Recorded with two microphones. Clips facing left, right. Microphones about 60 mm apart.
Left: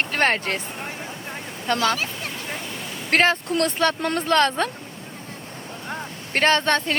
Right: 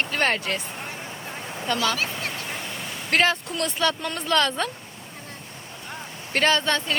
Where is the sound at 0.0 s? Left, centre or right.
Left.